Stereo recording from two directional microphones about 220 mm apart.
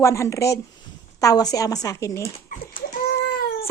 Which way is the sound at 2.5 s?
35° left (ahead or behind).